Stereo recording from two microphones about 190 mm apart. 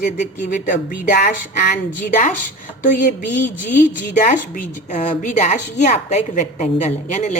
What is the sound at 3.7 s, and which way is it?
A woman's voice, 45° left (ahead or behind).